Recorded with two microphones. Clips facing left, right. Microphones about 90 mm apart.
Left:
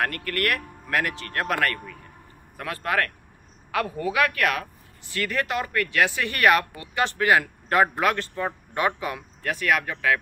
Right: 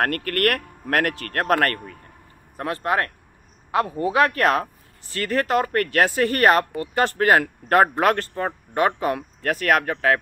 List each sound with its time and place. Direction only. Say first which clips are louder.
0.0 s speech: right 5 dB; 50° right (ahead or behind)
2.5 s speech: right 3 dB; 30° right (ahead or behind)